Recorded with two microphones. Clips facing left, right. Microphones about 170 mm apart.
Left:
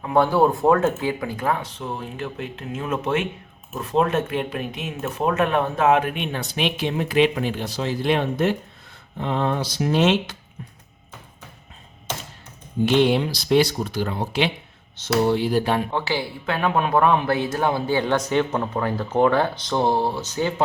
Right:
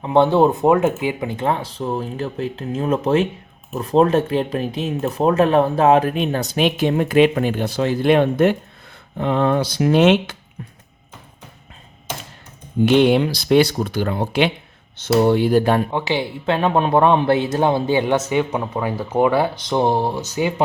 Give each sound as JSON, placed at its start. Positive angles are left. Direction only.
{"t": 0.0, "sound": "speech", "side_deg": -25}
{"t": 12.9, "sound": "speech", "side_deg": -60}
{"t": 15.9, "sound": "speech", "side_deg": -15}